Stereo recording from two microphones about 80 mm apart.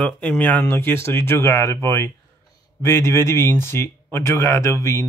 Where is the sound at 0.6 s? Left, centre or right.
Left.